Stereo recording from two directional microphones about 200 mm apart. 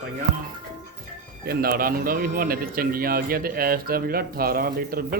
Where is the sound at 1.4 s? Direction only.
50° right (ahead or behind).